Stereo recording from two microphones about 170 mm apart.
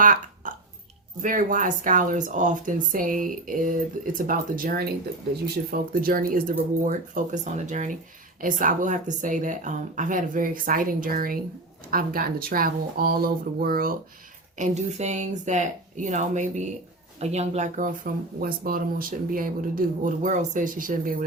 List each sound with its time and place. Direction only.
0.0 s burping: 50° right (ahead or behind)
1.2 s speech: 50° right (ahead or behind)
14.6 s speech: 40° right (ahead or behind)